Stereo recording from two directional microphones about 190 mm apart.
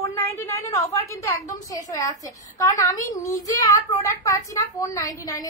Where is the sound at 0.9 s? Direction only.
15° left (ahead or behind).